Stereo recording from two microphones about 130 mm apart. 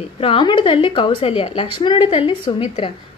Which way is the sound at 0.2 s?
40° left (ahead or behind).